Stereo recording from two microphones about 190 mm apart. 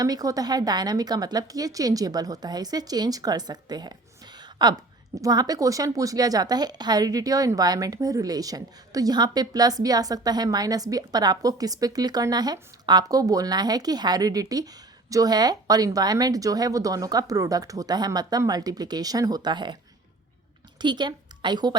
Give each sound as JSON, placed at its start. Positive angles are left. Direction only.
{"t": 0.0, "sound": "a woman's voice", "side_deg": -20}
{"t": 20.7, "sound": "a woman's voice", "side_deg": -25}